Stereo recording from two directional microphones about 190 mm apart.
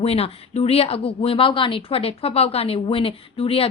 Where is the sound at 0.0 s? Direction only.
30° left (ahead or behind).